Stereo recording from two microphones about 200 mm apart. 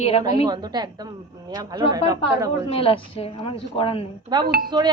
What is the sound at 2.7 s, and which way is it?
A woman's voice, 30° left (ahead or behind).